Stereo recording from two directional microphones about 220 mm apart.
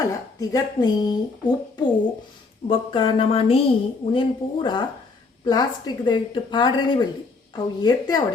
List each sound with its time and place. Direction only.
0.0 s a woman's voice: 15° left (ahead or behind)